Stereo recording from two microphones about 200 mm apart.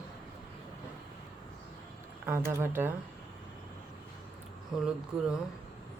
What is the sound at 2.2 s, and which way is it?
Speech, 10° right (ahead or behind).